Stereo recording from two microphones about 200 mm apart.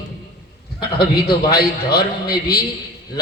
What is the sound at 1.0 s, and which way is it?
A man's voice, 50° left (ahead or behind).